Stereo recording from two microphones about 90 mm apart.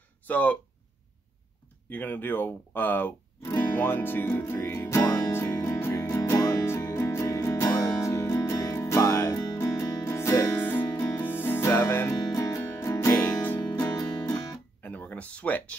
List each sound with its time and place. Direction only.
0.3 s speech: 20° left (ahead or behind)
1.9 s guitar: 20° left (ahead or behind)
11.1 s music: 25° left (ahead or behind)
13.2 s music: 20° left (ahead or behind)
13.9 s music: 40° left (ahead or behind)
14.8 s a sound: 20° left (ahead or behind)